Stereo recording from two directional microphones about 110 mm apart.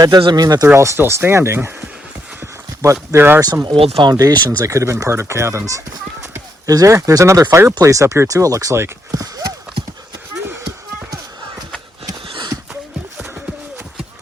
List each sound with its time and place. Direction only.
0.2 s speech: 40° right (ahead or behind)
0.7 s speech: 25° right (ahead or behind)
2.8 s speech: 30° right (ahead or behind)
3.4 s speech: 35° right (ahead or behind)
3.8 s speech: 65° right (ahead or behind)
4.1 s speech: 35° right (ahead or behind)
12.3 s horse: 45° right (ahead or behind)